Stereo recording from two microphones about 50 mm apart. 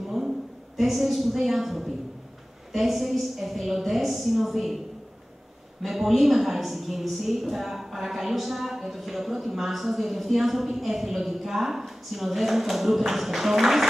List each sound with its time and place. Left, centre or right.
0.7 s a woman's voice: centre
5.8 s a woman's voice: centre